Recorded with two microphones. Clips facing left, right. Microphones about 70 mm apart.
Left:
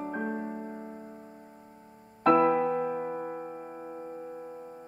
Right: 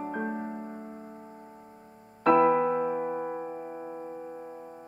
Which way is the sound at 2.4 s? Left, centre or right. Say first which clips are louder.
Right 2 dB; right.